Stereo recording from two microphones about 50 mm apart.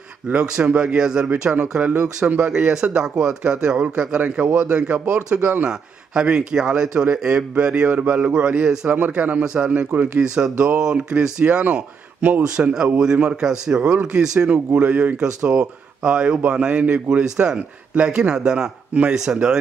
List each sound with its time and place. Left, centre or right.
0.4 s a man's voice: centre
7.9 s speech: right
8.3 s a man's voice: right
12.7 s a man's voice: centre
14.8 s a man's voice: right